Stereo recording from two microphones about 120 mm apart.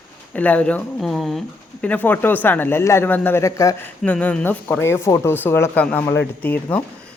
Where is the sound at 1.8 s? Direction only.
15° left (ahead or behind).